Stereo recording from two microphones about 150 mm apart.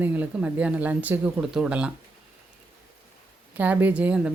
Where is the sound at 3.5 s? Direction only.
10° right (ahead or behind).